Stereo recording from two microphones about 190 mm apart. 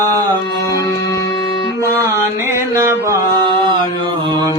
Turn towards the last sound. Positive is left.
turn(degrees=-15)  # may be behind; listen again after turning